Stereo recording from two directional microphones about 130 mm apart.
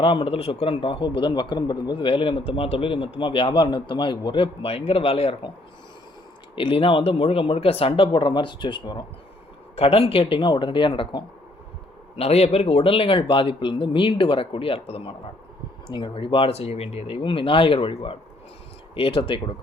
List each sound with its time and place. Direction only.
0.0 s a man's voice: 45° left (ahead or behind)
6.6 s a man's voice: 45° left (ahead or behind)
12.1 s a man's voice: 55° left (ahead or behind)